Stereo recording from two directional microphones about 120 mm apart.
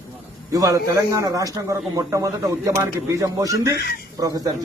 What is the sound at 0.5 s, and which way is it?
A man's voice, 30° right (ahead or behind).